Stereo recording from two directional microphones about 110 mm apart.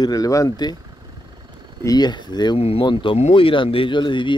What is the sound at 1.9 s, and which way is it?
Speech, 40° left (ahead or behind).